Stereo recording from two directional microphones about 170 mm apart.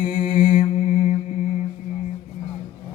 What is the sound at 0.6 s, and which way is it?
Mantra, 40° left (ahead or behind).